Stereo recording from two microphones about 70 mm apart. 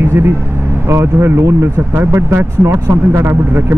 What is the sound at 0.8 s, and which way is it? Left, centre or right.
Speech, right.